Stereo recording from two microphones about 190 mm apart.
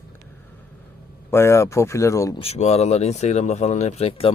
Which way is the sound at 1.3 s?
15° left (ahead or behind).